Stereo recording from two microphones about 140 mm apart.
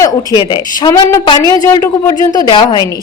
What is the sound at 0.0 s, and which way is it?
A woman's voice, 30° left (ahead or behind).